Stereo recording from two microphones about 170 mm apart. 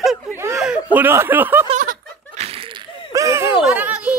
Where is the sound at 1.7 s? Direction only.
50° right (ahead or behind).